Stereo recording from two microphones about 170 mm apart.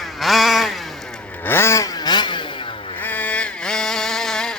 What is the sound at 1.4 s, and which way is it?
Motorcycle, 15° left (ahead or behind).